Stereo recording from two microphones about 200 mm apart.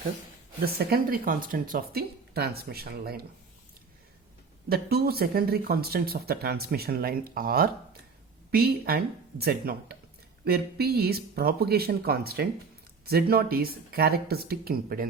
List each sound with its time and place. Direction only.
0.6 s speech: 50° right (ahead or behind)
4.7 s speech: 50° right (ahead or behind)